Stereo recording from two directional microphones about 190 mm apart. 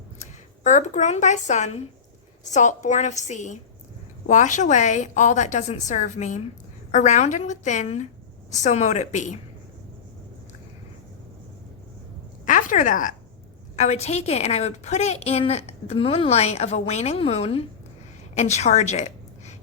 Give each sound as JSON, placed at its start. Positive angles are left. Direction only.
{"t": 0.2, "sound": "a woman's voice", "side_deg": 40}
{"t": 12.5, "sound": "a woman's voice", "side_deg": 45}